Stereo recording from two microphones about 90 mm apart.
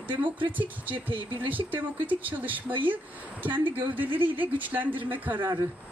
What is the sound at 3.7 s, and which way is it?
Speech, 20° right (ahead or behind).